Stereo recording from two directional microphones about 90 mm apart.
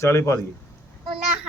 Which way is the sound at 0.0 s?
30° left (ahead or behind).